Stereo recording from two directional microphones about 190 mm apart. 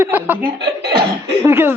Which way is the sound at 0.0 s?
10° right (ahead or behind).